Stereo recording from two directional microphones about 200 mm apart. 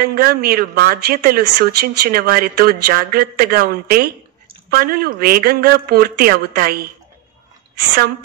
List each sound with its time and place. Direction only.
0.0 s a woman's voice: 50° right (ahead or behind)